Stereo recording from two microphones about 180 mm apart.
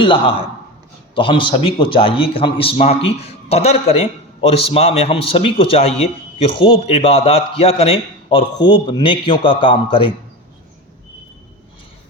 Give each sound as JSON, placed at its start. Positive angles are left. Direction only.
{"t": 0.0, "sound": "a man's voice", "side_deg": 30}